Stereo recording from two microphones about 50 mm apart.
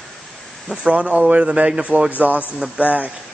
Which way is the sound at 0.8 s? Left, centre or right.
Right.